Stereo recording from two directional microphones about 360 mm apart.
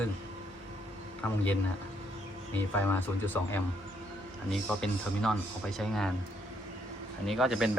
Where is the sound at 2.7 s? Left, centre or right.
Centre.